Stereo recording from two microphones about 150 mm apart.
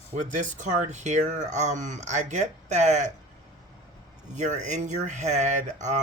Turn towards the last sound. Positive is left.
turn(degrees=-55)  # may be behind; listen again after turning